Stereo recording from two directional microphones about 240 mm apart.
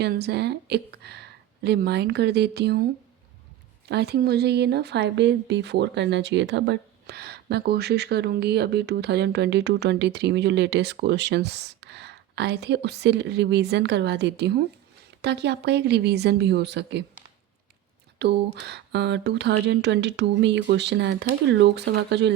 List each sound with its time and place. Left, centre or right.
0.0 s speech: right
3.8 s speech: right
18.2 s speech: right